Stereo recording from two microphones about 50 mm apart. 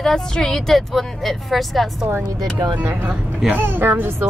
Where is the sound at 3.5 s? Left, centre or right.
Right.